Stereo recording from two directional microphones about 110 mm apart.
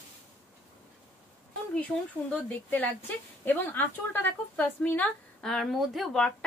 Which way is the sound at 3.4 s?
15° left (ahead or behind).